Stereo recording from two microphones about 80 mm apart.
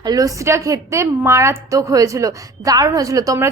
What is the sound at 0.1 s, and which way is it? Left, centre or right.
Speech, right.